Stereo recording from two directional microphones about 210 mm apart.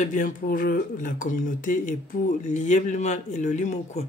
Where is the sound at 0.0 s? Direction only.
35° left (ahead or behind).